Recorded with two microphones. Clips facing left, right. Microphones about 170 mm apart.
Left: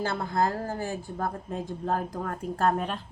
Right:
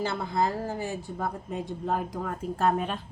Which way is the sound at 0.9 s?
Centre (ahead or behind).